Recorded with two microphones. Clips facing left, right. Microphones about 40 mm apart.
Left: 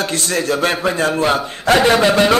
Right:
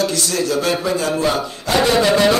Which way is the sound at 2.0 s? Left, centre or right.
Left.